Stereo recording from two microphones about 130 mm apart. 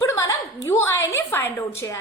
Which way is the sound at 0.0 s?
25° left (ahead or behind).